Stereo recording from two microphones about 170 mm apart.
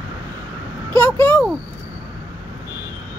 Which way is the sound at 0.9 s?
10° left (ahead or behind).